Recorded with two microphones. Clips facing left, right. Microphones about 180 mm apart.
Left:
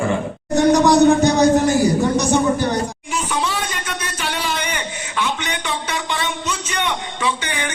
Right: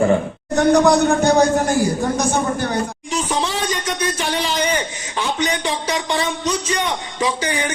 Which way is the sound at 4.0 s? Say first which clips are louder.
Right 4 dB; 30° right (ahead or behind).